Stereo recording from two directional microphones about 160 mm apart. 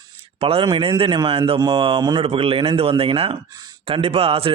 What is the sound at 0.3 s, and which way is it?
A man's voice, 35° right (ahead or behind).